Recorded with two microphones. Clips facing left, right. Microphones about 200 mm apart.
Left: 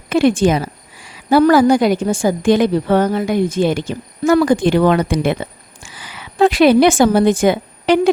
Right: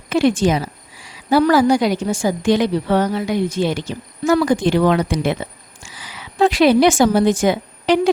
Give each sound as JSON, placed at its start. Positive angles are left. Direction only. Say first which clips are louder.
{"t": 0.1, "sound": "a woman's voice", "louder": "left 2 dB", "side_deg": 55}